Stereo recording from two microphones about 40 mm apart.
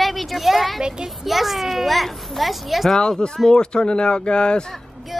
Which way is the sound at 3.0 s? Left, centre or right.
Left.